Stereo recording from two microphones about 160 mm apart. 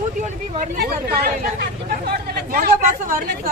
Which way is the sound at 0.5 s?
75° right (ahead or behind).